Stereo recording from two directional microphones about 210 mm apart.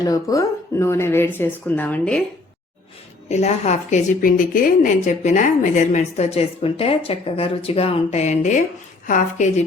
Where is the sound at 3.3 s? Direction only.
30° left (ahead or behind).